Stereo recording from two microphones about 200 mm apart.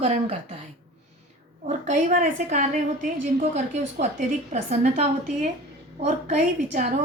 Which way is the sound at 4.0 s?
35° right (ahead or behind).